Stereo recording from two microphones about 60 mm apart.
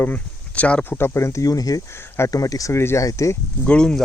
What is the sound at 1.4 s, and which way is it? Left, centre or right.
Speech, left.